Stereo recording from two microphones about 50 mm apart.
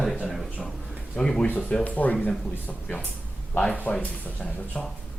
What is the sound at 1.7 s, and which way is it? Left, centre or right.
Speech, left.